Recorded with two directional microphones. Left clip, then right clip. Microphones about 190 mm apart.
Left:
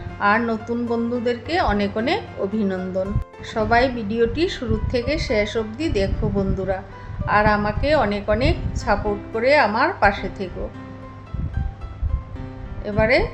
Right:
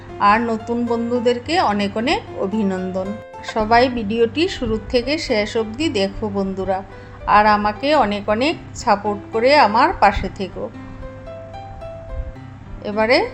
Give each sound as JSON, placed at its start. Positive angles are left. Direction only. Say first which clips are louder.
{"t": 0.2, "sound": "a woman's voice", "louder": "right 4 dB", "side_deg": -15}
{"t": 12.8, "sound": "speech", "louder": "right 2 dB", "side_deg": -20}